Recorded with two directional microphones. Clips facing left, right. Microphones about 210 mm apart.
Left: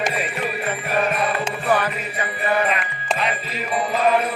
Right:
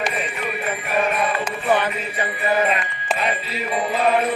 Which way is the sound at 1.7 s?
25° right (ahead or behind).